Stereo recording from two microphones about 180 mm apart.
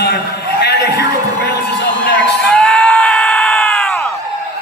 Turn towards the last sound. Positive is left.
turn(degrees=0)  # may be behind; listen again after turning